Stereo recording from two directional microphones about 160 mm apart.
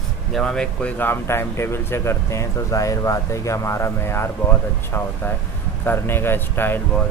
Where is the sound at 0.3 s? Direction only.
5° left (ahead or behind).